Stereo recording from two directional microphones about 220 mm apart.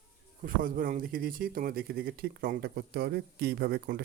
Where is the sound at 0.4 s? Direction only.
40° right (ahead or behind).